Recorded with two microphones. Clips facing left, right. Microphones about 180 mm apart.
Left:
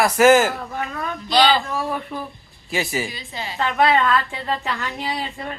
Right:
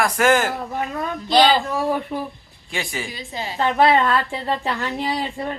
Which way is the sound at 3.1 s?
40° right (ahead or behind).